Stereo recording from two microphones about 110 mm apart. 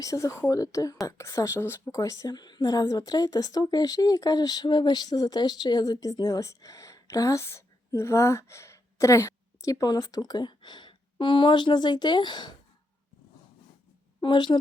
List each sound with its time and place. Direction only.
0.0 s a woman's voice: 30° left (ahead or behind)
2.0 s a woman's voice: 30° left (ahead or behind)
14.2 s a woman's voice: 45° left (ahead or behind)